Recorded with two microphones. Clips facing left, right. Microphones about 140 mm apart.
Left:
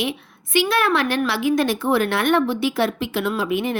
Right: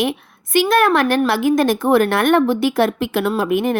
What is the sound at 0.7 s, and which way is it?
A woman's voice, 50° right (ahead or behind).